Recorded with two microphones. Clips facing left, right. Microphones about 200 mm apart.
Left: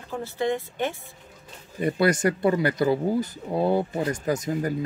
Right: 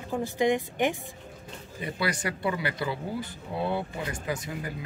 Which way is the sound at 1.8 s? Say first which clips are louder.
Left 9 dB; 50° left (ahead or behind).